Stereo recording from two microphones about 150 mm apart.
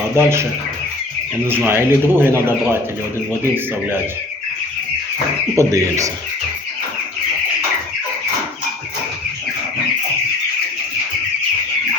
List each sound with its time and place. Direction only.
0.2 s speech: 15° right (ahead or behind)
1.5 s speech: 15° right (ahead or behind)
5.5 s speech: 20° right (ahead or behind)